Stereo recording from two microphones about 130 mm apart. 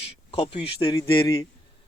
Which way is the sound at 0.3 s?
45° left (ahead or behind).